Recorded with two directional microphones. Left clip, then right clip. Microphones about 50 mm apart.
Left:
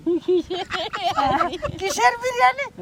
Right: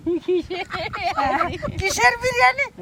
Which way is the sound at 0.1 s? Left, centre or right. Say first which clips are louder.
Left 1 dB; centre.